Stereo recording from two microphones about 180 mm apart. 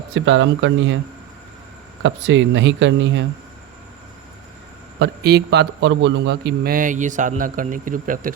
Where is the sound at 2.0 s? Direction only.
90° right.